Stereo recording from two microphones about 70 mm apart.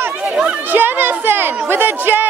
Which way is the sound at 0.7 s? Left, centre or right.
Right.